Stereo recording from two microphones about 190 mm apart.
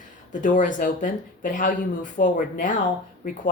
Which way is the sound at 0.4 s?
40° left (ahead or behind).